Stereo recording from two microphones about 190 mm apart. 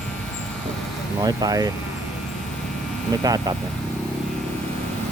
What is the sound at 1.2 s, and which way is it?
Speech, 20° right (ahead or behind).